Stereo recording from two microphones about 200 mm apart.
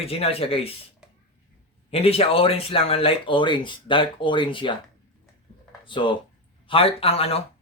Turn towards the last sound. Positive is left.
turn(degrees=30)  # may be behind; listen again after turning